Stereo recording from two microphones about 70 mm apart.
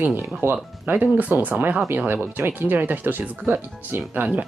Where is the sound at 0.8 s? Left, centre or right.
Right.